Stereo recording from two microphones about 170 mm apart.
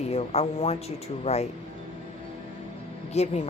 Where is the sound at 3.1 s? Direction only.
40° left (ahead or behind).